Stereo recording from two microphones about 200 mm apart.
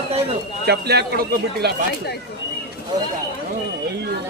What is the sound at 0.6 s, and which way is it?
A man's voice, 55° right (ahead or behind).